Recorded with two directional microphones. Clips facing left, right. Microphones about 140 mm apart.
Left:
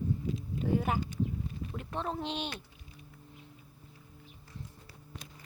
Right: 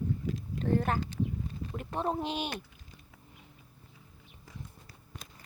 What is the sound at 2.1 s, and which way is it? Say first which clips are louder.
Speech: right 4 dB; 10° right (ahead or behind).